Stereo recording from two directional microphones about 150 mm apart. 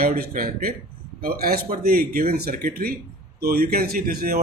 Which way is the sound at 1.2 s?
90° right.